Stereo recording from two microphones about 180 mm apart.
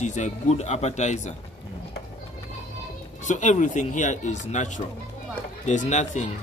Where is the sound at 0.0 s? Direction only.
40° left (ahead or behind).